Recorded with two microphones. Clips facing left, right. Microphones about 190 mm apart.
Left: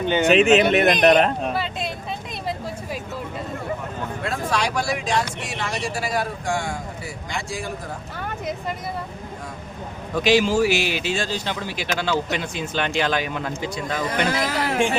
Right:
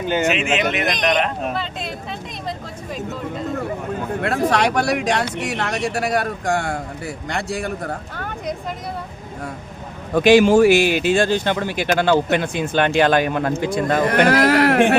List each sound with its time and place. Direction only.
0.0 s speech: 5° right (ahead or behind)
0.5 s speech: 35° left (ahead or behind)
1.4 s speech: centre (ahead or behind)
4.2 s speech: 65° right (ahead or behind)
8.1 s speech: centre (ahead or behind)
10.2 s speech: 55° right (ahead or behind)